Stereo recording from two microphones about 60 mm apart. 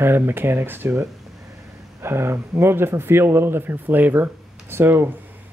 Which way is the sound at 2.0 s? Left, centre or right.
Right.